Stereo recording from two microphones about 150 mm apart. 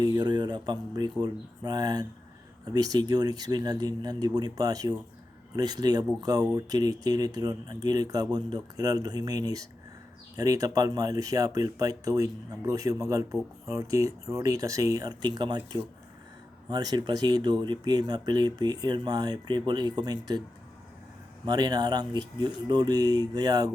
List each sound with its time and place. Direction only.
0.0 s speech: 25° right (ahead or behind)
21.4 s speech: 25° right (ahead or behind)